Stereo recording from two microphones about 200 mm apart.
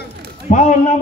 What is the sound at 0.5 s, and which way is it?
Speech, 35° left (ahead or behind).